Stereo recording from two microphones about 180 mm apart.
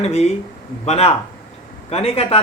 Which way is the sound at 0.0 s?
35° left (ahead or behind).